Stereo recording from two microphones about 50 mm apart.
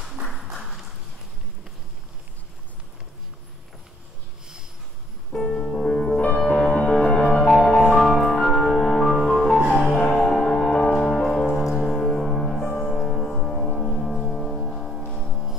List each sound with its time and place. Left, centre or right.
5.3 s music: centre
9.9 s music: centre